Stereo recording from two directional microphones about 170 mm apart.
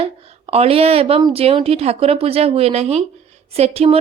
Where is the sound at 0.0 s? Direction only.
35° right (ahead or behind).